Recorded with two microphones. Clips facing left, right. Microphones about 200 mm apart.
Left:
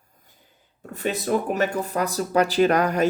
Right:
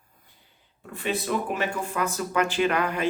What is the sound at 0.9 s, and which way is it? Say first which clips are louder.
Speech: left 4 dB; 40° left (ahead or behind).